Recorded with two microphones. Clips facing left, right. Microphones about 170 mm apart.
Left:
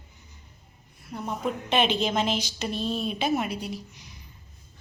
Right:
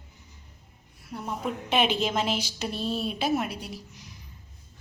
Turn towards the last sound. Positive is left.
turn(degrees=0)  # may be behind; listen again after turning